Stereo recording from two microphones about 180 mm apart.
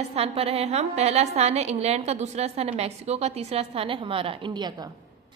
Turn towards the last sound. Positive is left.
turn(degrees=-25)  # may be behind; listen again after turning